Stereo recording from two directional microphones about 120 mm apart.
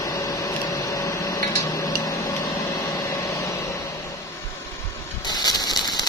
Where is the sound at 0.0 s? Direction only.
25° left (ahead or behind).